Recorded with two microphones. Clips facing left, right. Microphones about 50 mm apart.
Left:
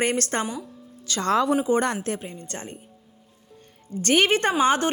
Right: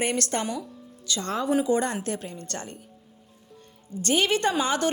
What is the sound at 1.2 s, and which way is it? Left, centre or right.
Speech, left.